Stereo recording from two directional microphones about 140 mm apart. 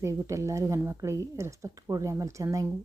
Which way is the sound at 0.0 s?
20° right (ahead or behind).